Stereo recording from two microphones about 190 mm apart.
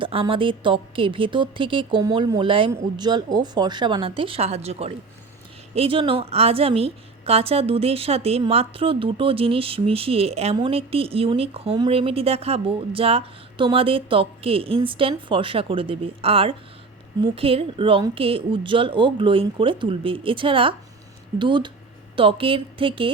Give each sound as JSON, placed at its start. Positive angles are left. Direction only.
{"t": 0.0, "sound": "a woman's voice", "side_deg": -30}